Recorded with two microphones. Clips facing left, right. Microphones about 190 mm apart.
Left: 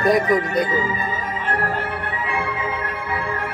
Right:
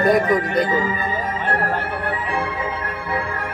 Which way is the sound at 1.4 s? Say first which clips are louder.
Even; 65° right (ahead or behind).